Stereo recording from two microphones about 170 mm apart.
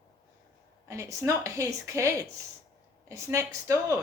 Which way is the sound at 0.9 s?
15° right (ahead or behind).